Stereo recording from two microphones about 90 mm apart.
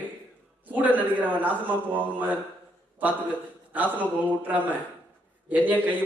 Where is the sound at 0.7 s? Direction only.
20° right (ahead or behind).